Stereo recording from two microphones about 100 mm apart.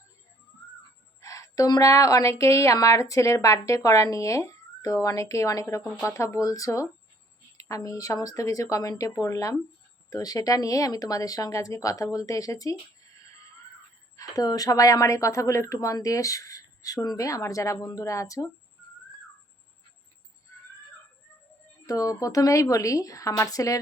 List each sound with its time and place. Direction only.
1.2 s a woman's voice: 35° left (ahead or behind)
14.2 s a woman's voice: 35° left (ahead or behind)
21.8 s a woman's voice: 35° left (ahead or behind)